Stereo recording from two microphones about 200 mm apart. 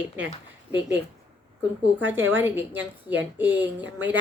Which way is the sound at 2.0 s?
10° right (ahead or behind).